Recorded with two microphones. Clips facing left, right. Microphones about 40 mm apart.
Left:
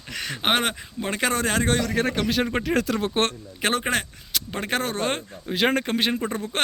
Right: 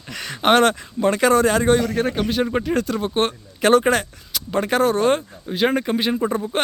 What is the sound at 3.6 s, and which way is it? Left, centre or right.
Speech, left.